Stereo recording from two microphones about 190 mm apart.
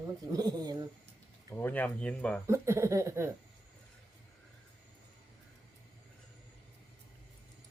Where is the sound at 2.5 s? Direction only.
15° right (ahead or behind).